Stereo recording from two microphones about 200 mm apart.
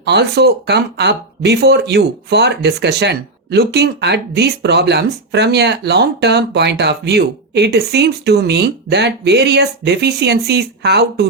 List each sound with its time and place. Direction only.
0.0 s speech: 55° right (ahead or behind)